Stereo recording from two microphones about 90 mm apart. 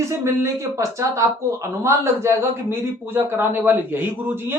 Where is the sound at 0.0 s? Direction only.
30° right (ahead or behind).